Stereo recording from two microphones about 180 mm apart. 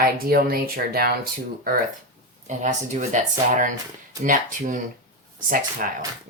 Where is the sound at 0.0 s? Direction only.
55° right (ahead or behind).